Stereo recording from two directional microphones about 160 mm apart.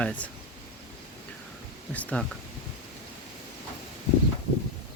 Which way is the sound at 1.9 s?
10° left (ahead or behind).